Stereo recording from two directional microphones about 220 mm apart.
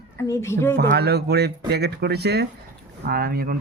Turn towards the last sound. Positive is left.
turn(degrees=-45)  # may be behind; listen again after turning